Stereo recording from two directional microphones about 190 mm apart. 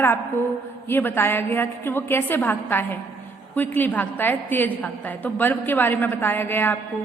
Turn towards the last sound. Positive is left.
turn(degrees=10)  # may be behind; listen again after turning